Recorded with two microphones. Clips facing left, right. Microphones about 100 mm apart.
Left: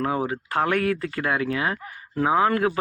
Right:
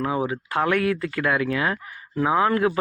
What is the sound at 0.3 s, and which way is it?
Speech, 40° left (ahead or behind).